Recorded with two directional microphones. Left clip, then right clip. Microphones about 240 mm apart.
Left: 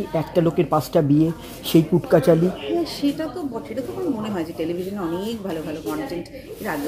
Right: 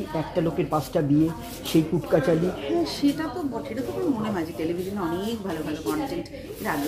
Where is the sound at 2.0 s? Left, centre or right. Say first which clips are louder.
Left 6 dB; left.